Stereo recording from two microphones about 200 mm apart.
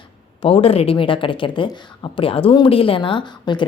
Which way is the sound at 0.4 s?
30° left (ahead or behind).